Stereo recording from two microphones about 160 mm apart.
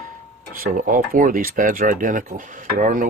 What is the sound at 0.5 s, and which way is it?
Speech, 60° right (ahead or behind).